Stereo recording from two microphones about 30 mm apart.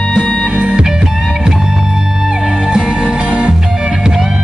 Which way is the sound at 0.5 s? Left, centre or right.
Right.